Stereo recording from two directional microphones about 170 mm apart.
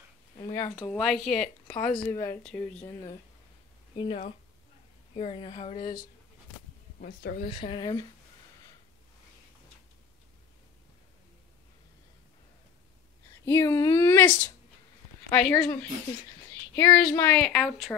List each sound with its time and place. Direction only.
0.4 s speech: 25° left (ahead or behind)
0.9 s speech: 5° left (ahead or behind)
3.9 s speech: 30° left (ahead or behind)
7.0 s speech: 55° left (ahead or behind)
7.4 s speech: 30° left (ahead or behind)
13.5 s speech: 15° left (ahead or behind)
15.6 s speech: 10° left (ahead or behind)
17.6 s speech: centre (ahead or behind)